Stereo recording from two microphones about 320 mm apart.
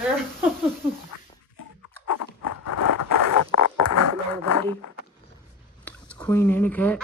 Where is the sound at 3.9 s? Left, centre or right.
Left.